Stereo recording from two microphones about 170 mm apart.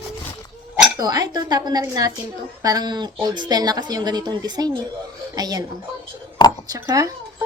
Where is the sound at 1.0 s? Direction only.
20° right (ahead or behind).